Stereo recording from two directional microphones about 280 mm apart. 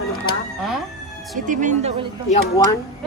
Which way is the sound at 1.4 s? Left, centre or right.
Right.